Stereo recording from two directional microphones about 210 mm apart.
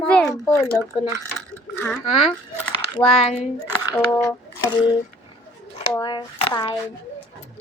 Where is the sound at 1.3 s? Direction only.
5° left (ahead or behind).